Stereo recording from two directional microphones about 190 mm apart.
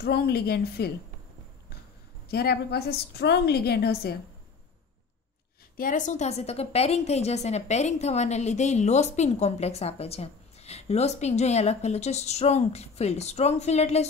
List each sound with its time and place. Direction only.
0.0 s a woman's voice: 55° left (ahead or behind)
2.2 s a woman's voice: 55° left (ahead or behind)
5.8 s a woman's voice: 45° left (ahead or behind)